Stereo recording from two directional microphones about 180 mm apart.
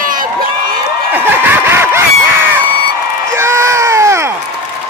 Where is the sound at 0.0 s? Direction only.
50° right (ahead or behind).